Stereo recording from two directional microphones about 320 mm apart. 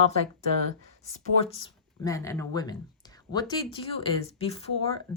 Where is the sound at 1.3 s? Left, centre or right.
Centre.